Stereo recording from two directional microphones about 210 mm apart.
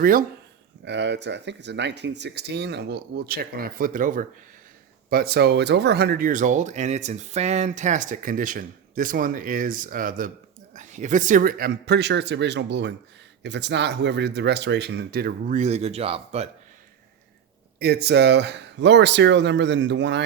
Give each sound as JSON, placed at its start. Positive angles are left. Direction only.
{"t": 0.0, "sound": "speech", "side_deg": -40}
{"t": 0.9, "sound": "speech", "side_deg": -55}
{"t": 17.7, "sound": "speech", "side_deg": -50}